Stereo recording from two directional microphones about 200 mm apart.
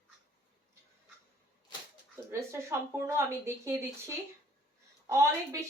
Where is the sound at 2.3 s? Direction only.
15° right (ahead or behind).